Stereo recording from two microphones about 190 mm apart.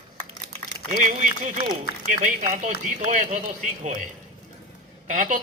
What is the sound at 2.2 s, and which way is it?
A man's voice, 40° right (ahead or behind).